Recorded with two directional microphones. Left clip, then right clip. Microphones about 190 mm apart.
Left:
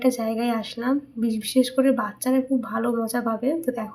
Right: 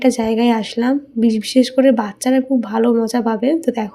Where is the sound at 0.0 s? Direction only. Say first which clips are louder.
Right 8 dB; 40° right (ahead or behind).